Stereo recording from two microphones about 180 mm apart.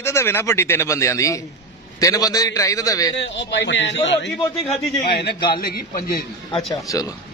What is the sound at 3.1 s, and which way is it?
A man's voice, 75° left (ahead or behind).